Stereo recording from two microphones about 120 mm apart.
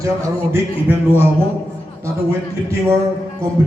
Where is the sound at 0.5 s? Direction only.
15° right (ahead or behind).